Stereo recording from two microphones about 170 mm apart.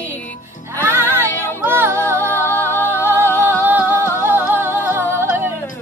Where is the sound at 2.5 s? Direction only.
10° left (ahead or behind).